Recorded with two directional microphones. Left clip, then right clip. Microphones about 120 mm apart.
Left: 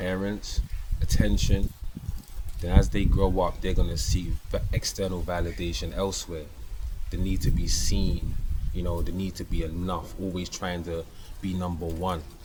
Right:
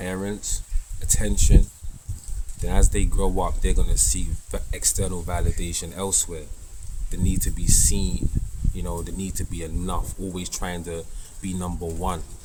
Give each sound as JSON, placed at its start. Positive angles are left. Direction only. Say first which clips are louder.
{"t": 0.0, "sound": "speech", "louder": "even", "side_deg": -30}
{"t": 2.6, "sound": "speech", "louder": "right 1 dB", "side_deg": -35}